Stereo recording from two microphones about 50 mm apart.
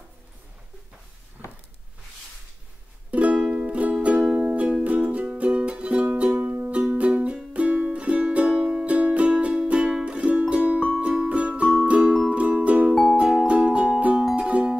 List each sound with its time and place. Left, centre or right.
3.1 s music: right
13.1 s music: centre